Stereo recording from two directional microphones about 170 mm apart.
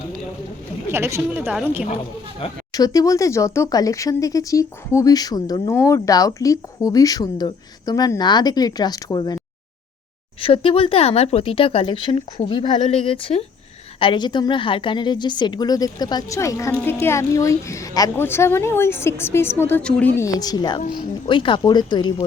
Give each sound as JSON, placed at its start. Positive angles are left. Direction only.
{"t": 0.9, "sound": "speech", "side_deg": -15}
{"t": 1.5, "sound": "a woman's voice", "side_deg": -5}
{"t": 2.4, "sound": "speech", "side_deg": 35}
{"t": 2.7, "sound": "speech", "side_deg": 20}
{"t": 10.4, "sound": "a woman's voice", "side_deg": 35}